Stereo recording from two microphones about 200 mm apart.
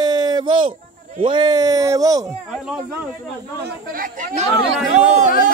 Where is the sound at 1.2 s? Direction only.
25° right (ahead or behind).